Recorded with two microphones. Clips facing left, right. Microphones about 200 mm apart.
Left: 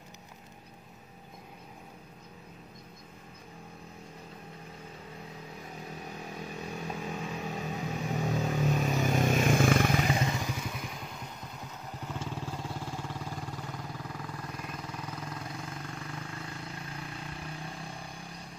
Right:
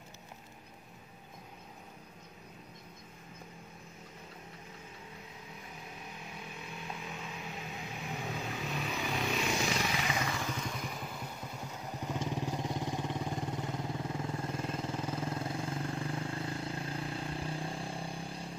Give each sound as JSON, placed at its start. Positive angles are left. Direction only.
{"t": 6.1, "sound": "vehicle", "side_deg": 40}
{"t": 10.1, "sound": "motorcycle", "side_deg": 20}
{"t": 10.5, "sound": "motorcycle", "side_deg": 5}
{"t": 12.0, "sound": "vehicle", "side_deg": -15}